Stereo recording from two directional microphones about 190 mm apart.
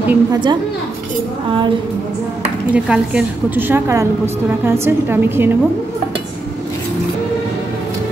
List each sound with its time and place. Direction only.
0.1 s a woman's voice: 20° right (ahead or behind)
2.7 s a woman's voice: 5° right (ahead or behind)